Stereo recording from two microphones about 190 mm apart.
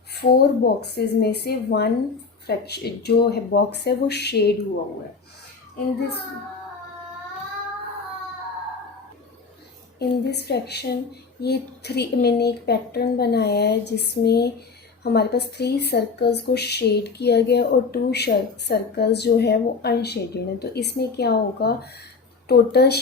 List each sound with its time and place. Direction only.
0.1 s speech: 55° left (ahead or behind)
10.0 s speech: 60° left (ahead or behind)